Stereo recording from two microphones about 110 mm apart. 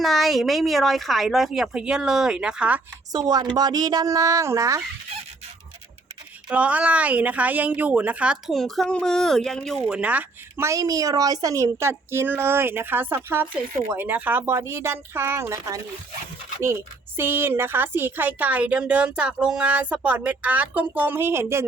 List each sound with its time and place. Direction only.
0.0 s a woman's voice: centre (ahead or behind)
3.1 s speech: 40° right (ahead or behind)
6.5 s a woman's voice: 10° right (ahead or behind)
8.5 s a woman's voice: centre (ahead or behind)
9.8 s a woman's voice: 10° right (ahead or behind)
10.6 s a woman's voice: 30° right (ahead or behind)